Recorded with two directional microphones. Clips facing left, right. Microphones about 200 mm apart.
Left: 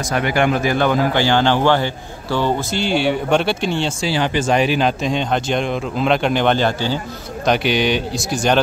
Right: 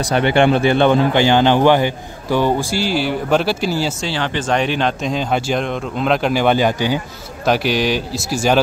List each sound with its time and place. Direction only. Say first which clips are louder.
0.0 s speech: right 4 dB; 30° right (ahead or behind); by 4.1 s 5° right (ahead or behind)
4.1 s speech: left 4 dB; 10° left (ahead or behind); by 7.0 s 10° right (ahead or behind)
7.4 s speech: even; centre (ahead or behind)